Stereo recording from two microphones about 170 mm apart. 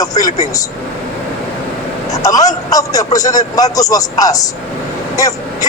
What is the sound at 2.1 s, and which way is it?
A man's voice, 20° left (ahead or behind).